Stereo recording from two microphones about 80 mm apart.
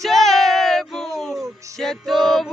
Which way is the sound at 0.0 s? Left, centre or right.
Centre.